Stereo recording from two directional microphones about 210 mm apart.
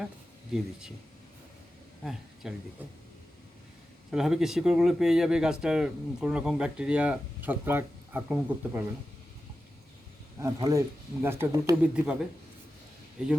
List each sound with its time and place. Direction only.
0.5 s speech: 5° right (ahead or behind)
2.4 s speech: centre (ahead or behind)
4.1 s speech: centre (ahead or behind)
10.4 s speech: 15° right (ahead or behind)
13.2 s speech: 5° right (ahead or behind)